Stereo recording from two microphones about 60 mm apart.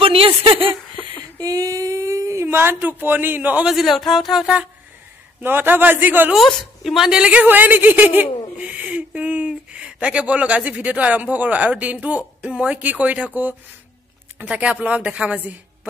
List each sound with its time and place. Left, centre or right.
1.4 s a sound: right
2.4 s speech: right
3.6 s speech: centre
5.4 s speech: right
6.3 s speech: centre
7.1 s speech: centre
7.4 s speech: right